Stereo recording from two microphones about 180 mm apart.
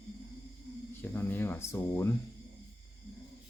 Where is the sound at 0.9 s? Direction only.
10° left (ahead or behind).